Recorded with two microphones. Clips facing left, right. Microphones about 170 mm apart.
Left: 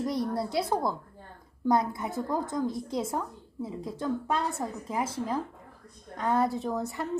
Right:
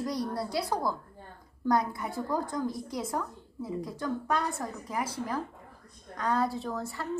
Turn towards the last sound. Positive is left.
turn(degrees=20)  # may be behind; listen again after turning